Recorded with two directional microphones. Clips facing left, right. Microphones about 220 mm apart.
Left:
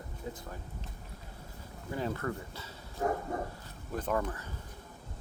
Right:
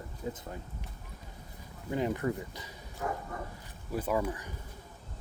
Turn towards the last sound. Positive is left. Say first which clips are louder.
# right 2 dB
turn(degrees=-10)  # may be behind; listen again after turning